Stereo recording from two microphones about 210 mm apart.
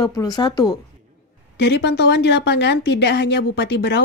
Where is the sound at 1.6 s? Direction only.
55° left (ahead or behind).